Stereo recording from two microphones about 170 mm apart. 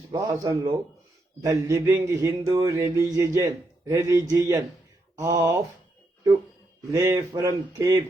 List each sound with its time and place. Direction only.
0.1 s speech: 20° right (ahead or behind)
6.9 s speech: 20° right (ahead or behind)